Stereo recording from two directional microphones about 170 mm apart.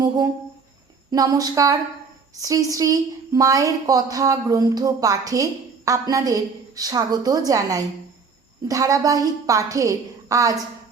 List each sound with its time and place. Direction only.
1.1 s a woman's voice: 20° right (ahead or behind)